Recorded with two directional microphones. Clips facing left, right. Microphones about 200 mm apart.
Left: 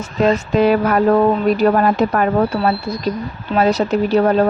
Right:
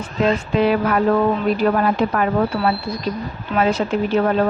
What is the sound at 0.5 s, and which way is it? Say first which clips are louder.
A woman's voice: left 3 dB; 45° left (ahead or behind).